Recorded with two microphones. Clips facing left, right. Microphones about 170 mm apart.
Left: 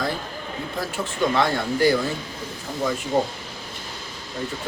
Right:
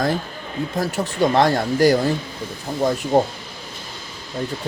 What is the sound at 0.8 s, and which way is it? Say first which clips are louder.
Speech: right 5 dB; 40° right (ahead or behind).